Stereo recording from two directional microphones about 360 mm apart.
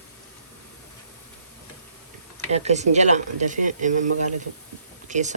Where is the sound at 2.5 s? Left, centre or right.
Centre.